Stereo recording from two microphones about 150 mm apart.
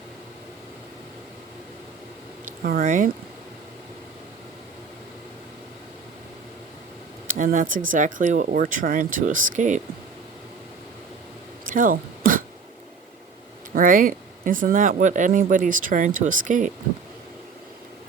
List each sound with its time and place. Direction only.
2.6 s speech: 60° right (ahead or behind)
7.3 s speech: 60° right (ahead or behind)
11.6 s throat clearing: 65° right (ahead or behind)
13.7 s speech: 65° right (ahead or behind)